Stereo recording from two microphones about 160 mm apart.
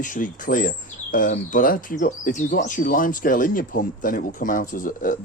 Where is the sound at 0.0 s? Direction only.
55° left (ahead or behind).